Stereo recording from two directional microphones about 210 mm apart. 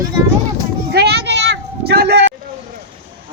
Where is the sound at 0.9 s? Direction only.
50° right (ahead or behind).